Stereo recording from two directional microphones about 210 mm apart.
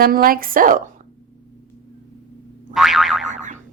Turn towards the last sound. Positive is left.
turn(degrees=-35)  # may be behind; listen again after turning